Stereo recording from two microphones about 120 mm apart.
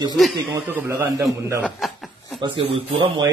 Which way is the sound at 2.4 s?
45° right (ahead or behind).